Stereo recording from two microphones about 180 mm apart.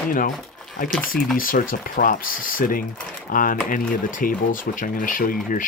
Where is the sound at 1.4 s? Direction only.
50° left (ahead or behind).